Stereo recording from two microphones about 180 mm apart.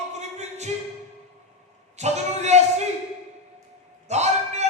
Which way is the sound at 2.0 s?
40° right (ahead or behind).